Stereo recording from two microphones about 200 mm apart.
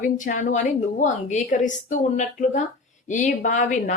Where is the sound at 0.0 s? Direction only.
40° left (ahead or behind).